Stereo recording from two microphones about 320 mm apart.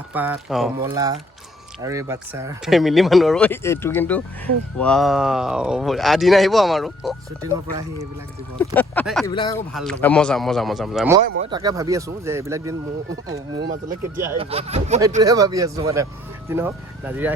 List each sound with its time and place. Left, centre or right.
0.1 s speech: centre
8.5 s speech: centre
9.7 s speech: centre
13.2 s speech: right
14.2 s speech: centre
14.5 s speech: centre